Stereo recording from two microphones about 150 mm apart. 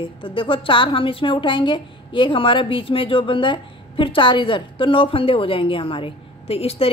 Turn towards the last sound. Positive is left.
turn(degrees=40)  # may be behind; listen again after turning